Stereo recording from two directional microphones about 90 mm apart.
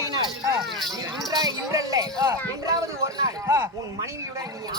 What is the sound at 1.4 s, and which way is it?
Speech, 40° right (ahead or behind).